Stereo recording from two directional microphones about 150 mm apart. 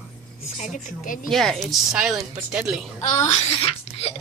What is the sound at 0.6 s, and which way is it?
Speech, 55° left (ahead or behind).